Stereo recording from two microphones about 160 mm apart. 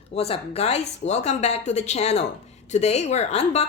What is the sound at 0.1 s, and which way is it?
A woman's voice, 40° left (ahead or behind).